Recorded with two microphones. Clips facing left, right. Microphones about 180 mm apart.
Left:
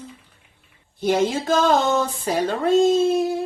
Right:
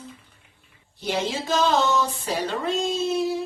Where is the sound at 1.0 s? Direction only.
50° left (ahead or behind).